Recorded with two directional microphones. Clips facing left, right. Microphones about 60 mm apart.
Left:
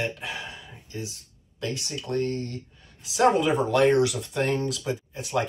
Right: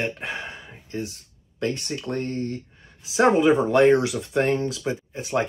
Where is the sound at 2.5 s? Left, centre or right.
Right.